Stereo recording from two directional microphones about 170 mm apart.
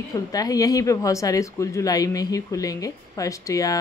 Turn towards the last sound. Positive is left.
turn(degrees=20)  # may be behind; listen again after turning